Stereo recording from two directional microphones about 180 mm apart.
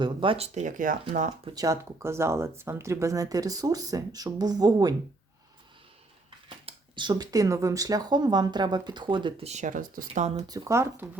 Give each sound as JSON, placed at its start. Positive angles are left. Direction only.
{"t": 0.0, "sound": "speech", "side_deg": -30}
{"t": 1.5, "sound": "speech", "side_deg": -20}
{"t": 6.7, "sound": "speech", "side_deg": -25}
{"t": 10.5, "sound": "speech", "side_deg": -15}